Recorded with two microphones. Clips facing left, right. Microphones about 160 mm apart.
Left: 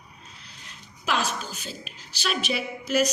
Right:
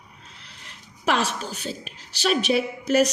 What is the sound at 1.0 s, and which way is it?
Speech, 70° right (ahead or behind).